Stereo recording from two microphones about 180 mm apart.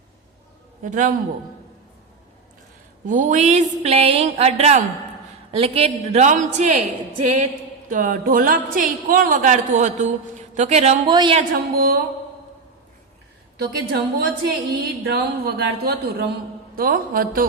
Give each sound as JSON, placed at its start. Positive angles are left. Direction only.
{"t": 0.8, "sound": "a woman's voice", "side_deg": -45}
{"t": 3.1, "sound": "a woman's voice", "side_deg": -45}
{"t": 11.0, "sound": "a woman's voice", "side_deg": -25}
{"t": 11.5, "sound": "a woman's voice", "side_deg": -55}
{"t": 13.6, "sound": "a woman's voice", "side_deg": -60}